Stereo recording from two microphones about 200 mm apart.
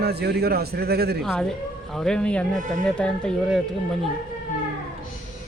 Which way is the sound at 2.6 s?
40° right (ahead or behind).